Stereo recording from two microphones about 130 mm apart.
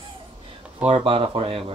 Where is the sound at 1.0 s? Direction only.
45° right (ahead or behind).